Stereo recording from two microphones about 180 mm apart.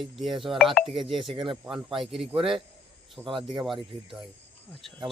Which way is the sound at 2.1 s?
Centre (ahead or behind).